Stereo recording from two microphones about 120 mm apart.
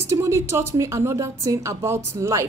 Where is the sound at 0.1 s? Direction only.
25° right (ahead or behind).